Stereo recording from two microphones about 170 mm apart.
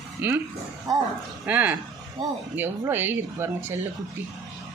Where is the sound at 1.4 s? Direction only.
10° right (ahead or behind).